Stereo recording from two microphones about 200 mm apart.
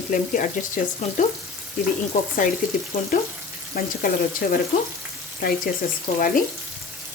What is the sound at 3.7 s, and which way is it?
Speech, 45° left (ahead or behind).